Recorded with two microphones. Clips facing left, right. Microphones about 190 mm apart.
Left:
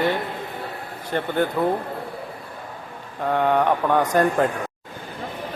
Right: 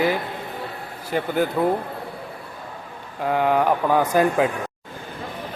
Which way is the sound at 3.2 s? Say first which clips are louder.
Even; 5° right (ahead or behind).